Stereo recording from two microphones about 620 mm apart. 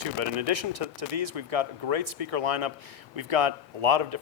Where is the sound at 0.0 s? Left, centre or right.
Right.